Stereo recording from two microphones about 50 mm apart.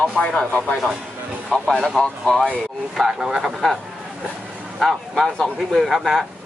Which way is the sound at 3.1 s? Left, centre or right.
Centre.